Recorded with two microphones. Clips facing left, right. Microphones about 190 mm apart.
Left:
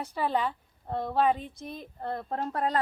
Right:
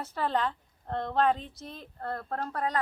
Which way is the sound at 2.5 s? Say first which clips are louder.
Left 3 dB; 30° left (ahead or behind).